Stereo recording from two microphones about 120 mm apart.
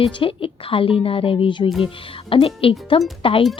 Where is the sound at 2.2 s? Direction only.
50° left (ahead or behind).